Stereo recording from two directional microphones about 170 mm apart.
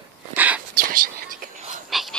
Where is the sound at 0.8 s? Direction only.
55° right (ahead or behind).